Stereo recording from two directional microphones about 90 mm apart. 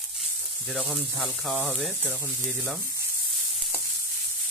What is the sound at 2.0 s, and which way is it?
Speech, 15° left (ahead or behind).